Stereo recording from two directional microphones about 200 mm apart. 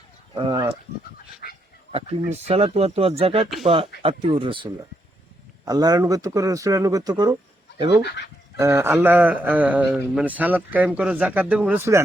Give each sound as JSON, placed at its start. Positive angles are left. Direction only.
{"t": 0.3, "sound": "speech", "side_deg": -20}
{"t": 1.4, "sound": "speech", "side_deg": 45}
{"t": 1.9, "sound": "a man's voice", "side_deg": -30}
{"t": 8.5, "sound": "a man's voice", "side_deg": -15}